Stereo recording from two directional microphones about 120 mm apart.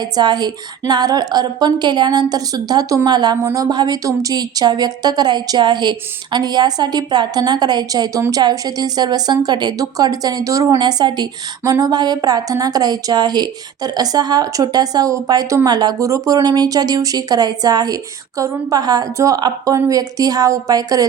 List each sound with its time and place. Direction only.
0.0 s speech: 35° right (ahead or behind)